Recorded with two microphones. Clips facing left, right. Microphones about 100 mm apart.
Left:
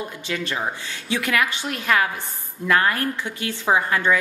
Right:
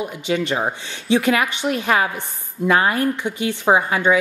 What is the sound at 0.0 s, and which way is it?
A woman's voice, 20° right (ahead or behind).